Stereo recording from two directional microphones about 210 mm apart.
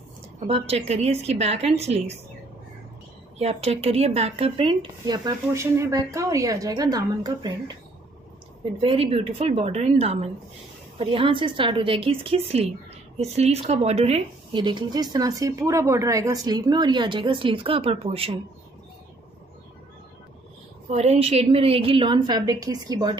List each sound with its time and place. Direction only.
0.5 s a woman's voice: 30° right (ahead or behind)
3.3 s speech: 30° right (ahead or behind)
8.7 s speech: 25° right (ahead or behind)
20.9 s speech: 30° right (ahead or behind)